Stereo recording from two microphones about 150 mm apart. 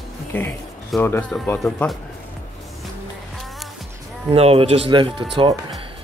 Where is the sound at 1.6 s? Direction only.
5° left (ahead or behind).